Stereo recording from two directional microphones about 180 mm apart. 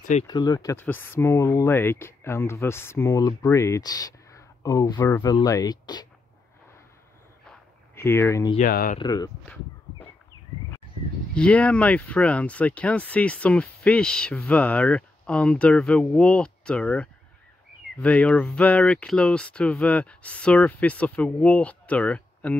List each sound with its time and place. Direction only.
0.3 s speech: 20° left (ahead or behind)
7.4 s a sound: 15° left (ahead or behind)
8.5 s speech: 50° left (ahead or behind)
8.9 s speech: 20° left (ahead or behind)
11.3 s speech: 5° left (ahead or behind)